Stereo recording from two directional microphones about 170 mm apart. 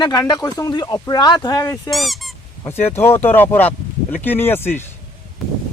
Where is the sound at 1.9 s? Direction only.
Centre (ahead or behind).